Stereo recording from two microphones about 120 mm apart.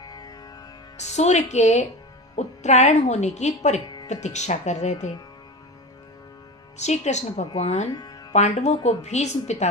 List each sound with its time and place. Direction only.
0.0 s music: 35° left (ahead or behind)
0.9 s a woman's voice: 70° left (ahead or behind)
6.7 s a woman's voice: 70° left (ahead or behind)